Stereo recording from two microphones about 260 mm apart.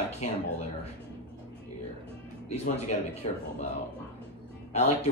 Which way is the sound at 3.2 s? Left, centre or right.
Left.